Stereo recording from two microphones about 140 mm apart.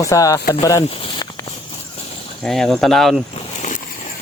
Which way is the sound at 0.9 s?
40° left (ahead or behind).